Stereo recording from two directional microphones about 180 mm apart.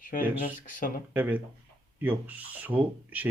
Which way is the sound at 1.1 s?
10° right (ahead or behind).